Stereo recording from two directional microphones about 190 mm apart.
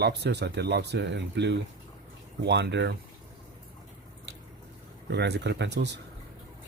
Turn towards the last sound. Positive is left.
turn(degrees=-65)  # may be behind; listen again after turning